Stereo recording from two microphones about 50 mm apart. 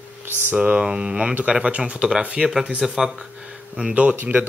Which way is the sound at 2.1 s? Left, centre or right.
Centre.